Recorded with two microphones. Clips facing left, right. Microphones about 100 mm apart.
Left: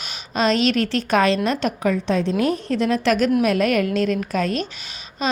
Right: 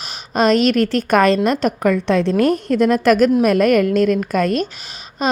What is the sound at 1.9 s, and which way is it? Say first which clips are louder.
Speech: right 5 dB; 65° right (ahead or behind).